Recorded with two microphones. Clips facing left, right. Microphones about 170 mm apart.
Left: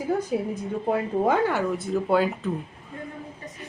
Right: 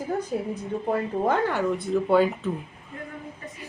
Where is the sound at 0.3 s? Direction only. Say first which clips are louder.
Left 1 dB; 10° left (ahead or behind).